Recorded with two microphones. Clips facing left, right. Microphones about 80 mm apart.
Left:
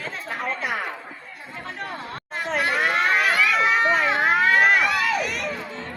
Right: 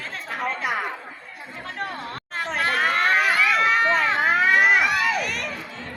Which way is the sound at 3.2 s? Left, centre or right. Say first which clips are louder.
Even; centre.